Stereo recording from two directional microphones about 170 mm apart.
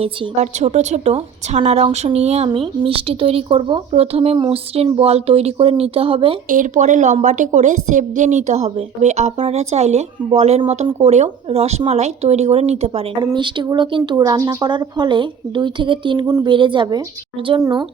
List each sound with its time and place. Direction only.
0.0 s a woman's voice: 40° right (ahead or behind)
6.5 s a woman's voice: 45° right (ahead or behind); by 17.8 s 25° right (ahead or behind)